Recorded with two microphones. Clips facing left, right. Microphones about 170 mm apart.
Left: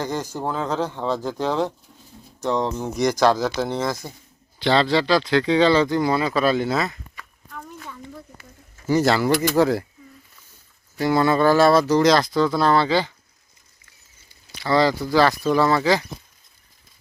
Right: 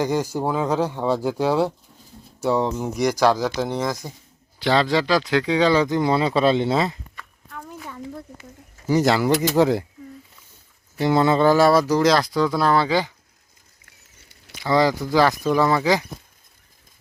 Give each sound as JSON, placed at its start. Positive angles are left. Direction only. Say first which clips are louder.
{"t": 0.0, "sound": "speech", "louder": "right 4 dB", "side_deg": -10}
{"t": 7.6, "sound": "a sound", "louder": "right 2 dB", "side_deg": -10}
{"t": 8.9, "sound": "speech", "louder": "even", "side_deg": -15}
{"t": 10.9, "sound": "speech", "louder": "right 1 dB", "side_deg": -25}
{"t": 14.2, "sound": "a sound", "louder": "right 4 dB", "side_deg": -75}
{"t": 14.6, "sound": "speech", "louder": "even", "side_deg": -15}